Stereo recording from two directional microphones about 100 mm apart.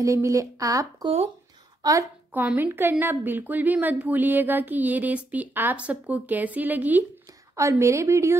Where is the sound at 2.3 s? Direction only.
15° right (ahead or behind).